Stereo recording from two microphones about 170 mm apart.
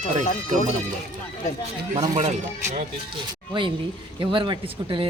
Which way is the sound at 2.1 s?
45° right (ahead or behind).